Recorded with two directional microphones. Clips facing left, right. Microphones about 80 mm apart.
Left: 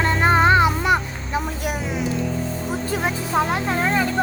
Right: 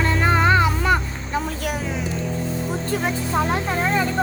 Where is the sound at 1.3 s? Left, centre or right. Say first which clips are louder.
Even; centre.